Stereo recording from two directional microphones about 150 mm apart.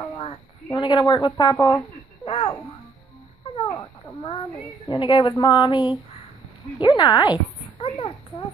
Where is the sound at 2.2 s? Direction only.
35° left (ahead or behind).